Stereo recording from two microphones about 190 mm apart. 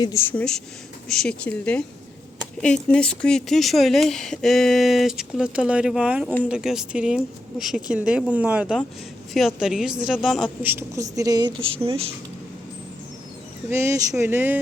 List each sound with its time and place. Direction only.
0.0 s a woman's voice: 15° left (ahead or behind); by 12.1 s 30° right (ahead or behind)
13.7 s a woman's voice: 15° right (ahead or behind)